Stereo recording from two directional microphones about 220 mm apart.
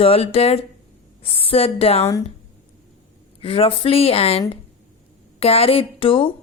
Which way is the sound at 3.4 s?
25° left (ahead or behind).